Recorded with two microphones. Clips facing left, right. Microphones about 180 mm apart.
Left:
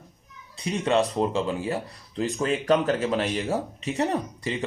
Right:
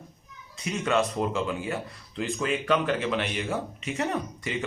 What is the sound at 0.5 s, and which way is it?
Speech, 30° left (ahead or behind).